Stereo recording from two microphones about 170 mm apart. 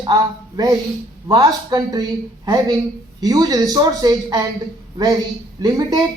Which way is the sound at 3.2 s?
20° right (ahead or behind).